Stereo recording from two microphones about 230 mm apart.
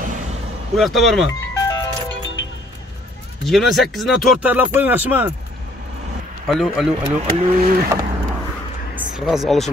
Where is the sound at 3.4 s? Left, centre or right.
Centre.